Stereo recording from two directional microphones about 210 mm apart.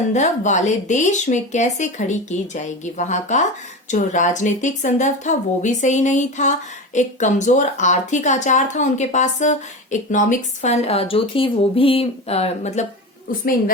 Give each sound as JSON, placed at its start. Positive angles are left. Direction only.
{"t": 0.1, "sound": "speech", "side_deg": 35}